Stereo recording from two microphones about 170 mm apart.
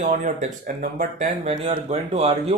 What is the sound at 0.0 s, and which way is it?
Speech, 45° right (ahead or behind).